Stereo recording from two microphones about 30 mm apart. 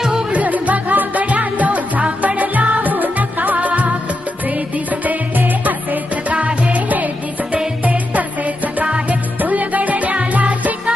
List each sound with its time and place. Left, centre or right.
0.3 s music: right
6.3 s music: right